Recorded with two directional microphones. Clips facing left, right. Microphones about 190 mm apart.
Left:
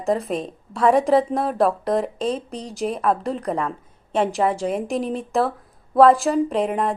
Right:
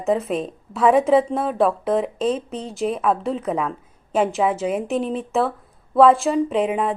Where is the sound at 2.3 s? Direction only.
35° left (ahead or behind).